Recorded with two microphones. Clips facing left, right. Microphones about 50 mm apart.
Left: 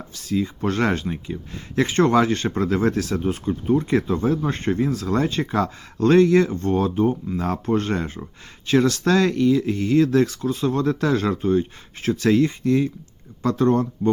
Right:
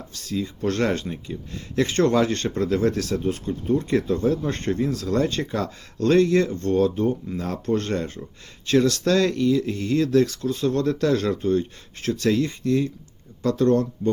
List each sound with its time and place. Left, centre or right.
0.1 s speech: left
4.9 s speech: left
5.3 s speech: centre